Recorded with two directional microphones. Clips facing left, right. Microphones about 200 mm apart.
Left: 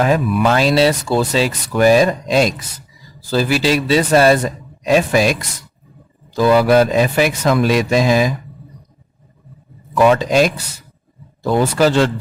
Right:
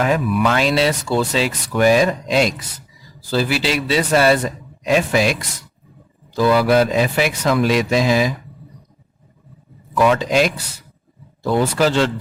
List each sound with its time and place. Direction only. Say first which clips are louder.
0.0 s speech: left 2 dB; 35° left (ahead or behind)
10.1 s speech: left 3 dB; 45° left (ahead or behind)